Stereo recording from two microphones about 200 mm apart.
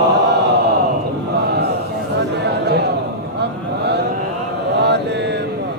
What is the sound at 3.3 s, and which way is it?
Vehicle, 55° right (ahead or behind).